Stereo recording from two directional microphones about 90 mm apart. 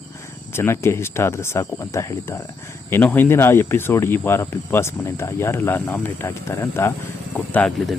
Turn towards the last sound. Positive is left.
turn(degrees=15)  # may be behind; listen again after turning